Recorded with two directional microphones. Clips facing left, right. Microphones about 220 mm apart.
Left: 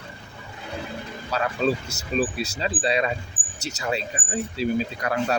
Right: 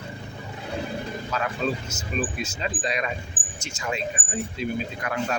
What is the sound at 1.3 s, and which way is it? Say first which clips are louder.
Speech: left 4 dB; 35° left (ahead or behind).